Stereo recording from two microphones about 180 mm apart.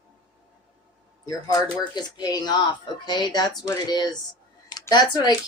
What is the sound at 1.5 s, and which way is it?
Speech, 20° left (ahead or behind).